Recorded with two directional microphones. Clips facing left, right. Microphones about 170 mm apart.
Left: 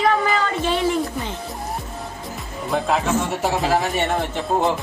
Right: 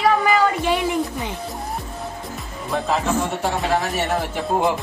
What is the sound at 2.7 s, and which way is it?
Speech, centre (ahead or behind).